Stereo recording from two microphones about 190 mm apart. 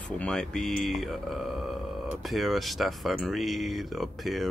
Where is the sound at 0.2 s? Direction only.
5° left (ahead or behind).